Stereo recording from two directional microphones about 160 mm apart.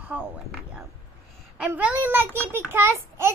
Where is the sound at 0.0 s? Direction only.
10° right (ahead or behind).